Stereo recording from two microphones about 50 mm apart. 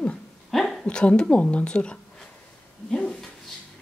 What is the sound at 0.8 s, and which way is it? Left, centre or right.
A woman's voice, left.